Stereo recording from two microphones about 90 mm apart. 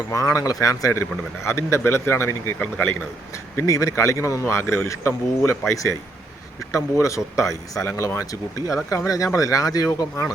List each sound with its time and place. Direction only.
0.1 s a man's voice: 40° left (ahead or behind)